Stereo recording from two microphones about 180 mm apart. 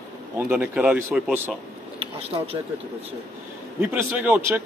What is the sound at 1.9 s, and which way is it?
Speech, 30° right (ahead or behind).